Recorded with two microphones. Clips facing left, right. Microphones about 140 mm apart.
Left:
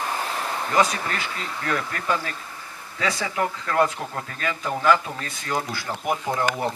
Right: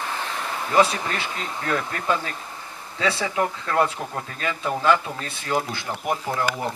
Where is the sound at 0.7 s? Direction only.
25° right (ahead or behind).